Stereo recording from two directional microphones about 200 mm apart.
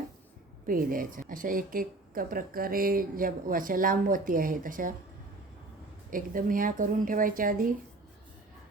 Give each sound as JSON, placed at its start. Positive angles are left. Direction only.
{"t": 0.7, "sound": "speech", "side_deg": -45}
{"t": 6.1, "sound": "speech", "side_deg": -45}